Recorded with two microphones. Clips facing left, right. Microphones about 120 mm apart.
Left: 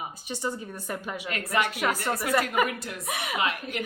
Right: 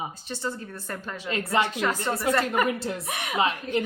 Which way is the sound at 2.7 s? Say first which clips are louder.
Right 7 dB; 30° right (ahead or behind).